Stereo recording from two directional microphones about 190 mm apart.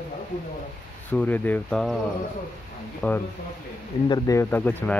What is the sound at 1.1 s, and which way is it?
Speech, 10° left (ahead or behind).